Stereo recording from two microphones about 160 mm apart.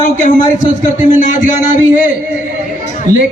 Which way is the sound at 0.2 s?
50° left (ahead or behind).